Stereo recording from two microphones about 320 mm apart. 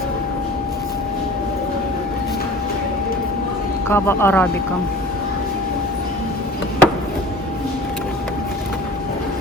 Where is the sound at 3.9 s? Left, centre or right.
Centre.